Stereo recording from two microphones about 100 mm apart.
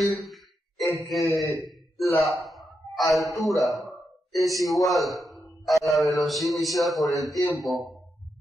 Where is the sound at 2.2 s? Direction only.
Centre (ahead or behind).